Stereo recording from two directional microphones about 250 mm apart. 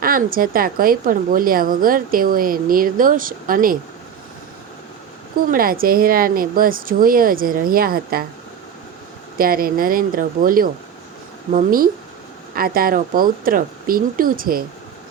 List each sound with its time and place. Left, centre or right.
0.0 s a woman's voice: right
5.5 s a woman's voice: right
9.4 s a woman's voice: right